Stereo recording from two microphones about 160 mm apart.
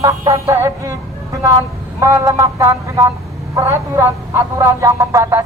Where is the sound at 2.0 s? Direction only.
20° right (ahead or behind).